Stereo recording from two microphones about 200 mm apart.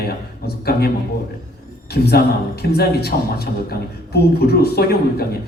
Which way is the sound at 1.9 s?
50° left (ahead or behind).